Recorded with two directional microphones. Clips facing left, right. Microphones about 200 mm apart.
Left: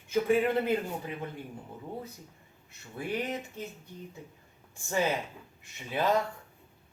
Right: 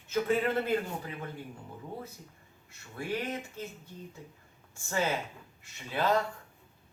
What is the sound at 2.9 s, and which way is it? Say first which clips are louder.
Speech: left 1 dB; 20° left (ahead or behind).